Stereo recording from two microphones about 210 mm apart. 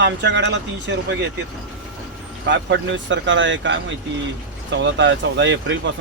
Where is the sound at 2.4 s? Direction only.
55° right (ahead or behind).